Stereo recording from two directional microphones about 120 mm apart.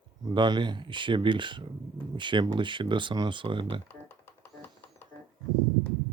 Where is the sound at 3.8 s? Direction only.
20° left (ahead or behind).